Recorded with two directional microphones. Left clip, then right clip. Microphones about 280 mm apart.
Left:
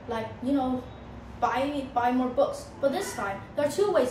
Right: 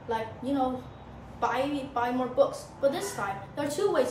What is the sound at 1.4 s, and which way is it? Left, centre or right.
A woman's voice, centre.